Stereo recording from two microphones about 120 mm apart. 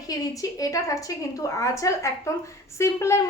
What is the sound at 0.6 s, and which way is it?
A woman's voice, 30° left (ahead or behind).